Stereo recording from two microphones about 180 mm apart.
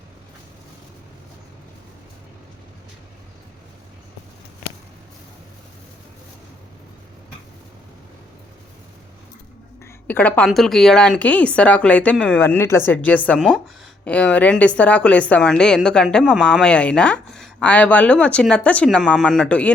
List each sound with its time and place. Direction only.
9.8 s a woman's voice: 10° left (ahead or behind)